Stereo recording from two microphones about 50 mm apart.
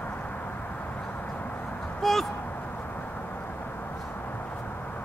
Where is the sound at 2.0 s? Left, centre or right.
Centre.